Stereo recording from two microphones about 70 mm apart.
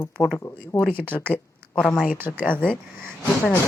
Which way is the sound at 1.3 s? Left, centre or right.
Centre.